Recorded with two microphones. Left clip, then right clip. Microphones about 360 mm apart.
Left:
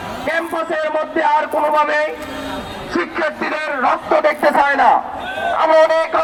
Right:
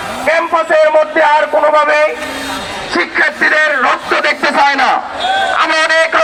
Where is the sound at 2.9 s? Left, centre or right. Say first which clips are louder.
Right 7 dB; centre.